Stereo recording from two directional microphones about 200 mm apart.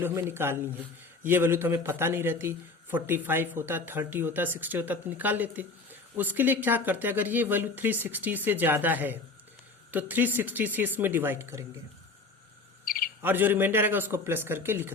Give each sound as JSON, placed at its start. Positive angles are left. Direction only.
{"t": 0.0, "sound": "speech", "side_deg": -10}
{"t": 12.8, "sound": "a sound", "side_deg": 45}
{"t": 13.2, "sound": "speech", "side_deg": -10}